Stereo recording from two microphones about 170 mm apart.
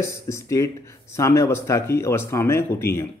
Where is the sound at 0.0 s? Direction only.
15° left (ahead or behind).